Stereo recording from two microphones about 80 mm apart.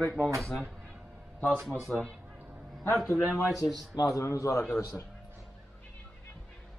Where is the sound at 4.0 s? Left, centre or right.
Left.